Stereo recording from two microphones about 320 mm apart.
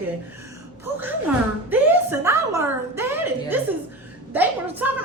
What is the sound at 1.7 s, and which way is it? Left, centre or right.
Speech, centre.